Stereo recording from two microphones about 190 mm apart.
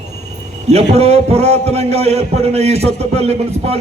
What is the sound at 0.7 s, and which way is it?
A man's voice, 35° right (ahead or behind).